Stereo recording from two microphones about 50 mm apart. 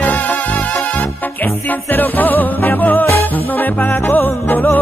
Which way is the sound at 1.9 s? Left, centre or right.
Left.